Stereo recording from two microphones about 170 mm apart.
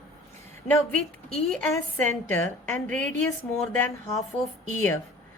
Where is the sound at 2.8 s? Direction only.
50° right (ahead or behind).